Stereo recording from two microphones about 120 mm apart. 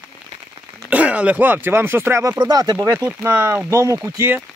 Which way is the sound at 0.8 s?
10° right (ahead or behind).